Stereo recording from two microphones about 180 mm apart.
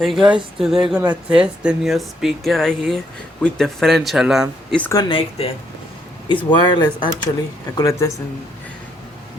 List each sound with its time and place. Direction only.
0.0 s a woman's voice: centre (ahead or behind)
4.8 s speech: 15° left (ahead or behind)
5.0 s speech: 30° left (ahead or behind)